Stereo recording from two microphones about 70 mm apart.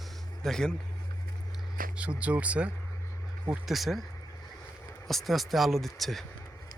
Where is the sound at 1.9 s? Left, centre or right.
Centre.